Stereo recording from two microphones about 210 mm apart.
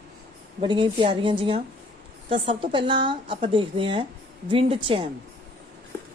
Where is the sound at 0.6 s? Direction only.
25° right (ahead or behind).